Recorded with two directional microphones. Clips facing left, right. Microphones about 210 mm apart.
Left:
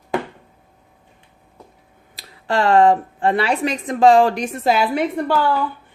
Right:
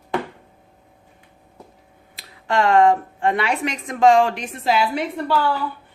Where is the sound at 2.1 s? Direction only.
30° left (ahead or behind); by 5.4 s 50° left (ahead or behind).